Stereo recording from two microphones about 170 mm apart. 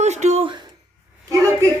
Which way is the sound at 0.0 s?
45° right (ahead or behind).